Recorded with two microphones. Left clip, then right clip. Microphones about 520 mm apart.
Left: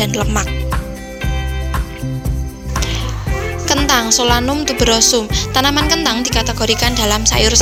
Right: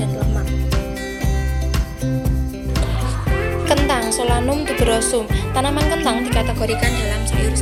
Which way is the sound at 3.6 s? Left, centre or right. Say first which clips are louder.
Left 5 dB; left.